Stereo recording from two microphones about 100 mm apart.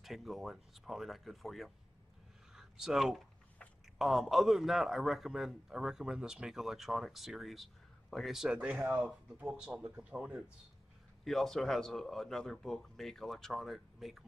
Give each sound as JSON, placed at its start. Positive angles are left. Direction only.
{"t": 0.0, "sound": "a man's voice", "side_deg": 0}
{"t": 2.5, "sound": "a sound", "side_deg": -5}
{"t": 4.0, "sound": "a man's voice", "side_deg": 0}
{"t": 11.2, "sound": "a man's voice", "side_deg": 5}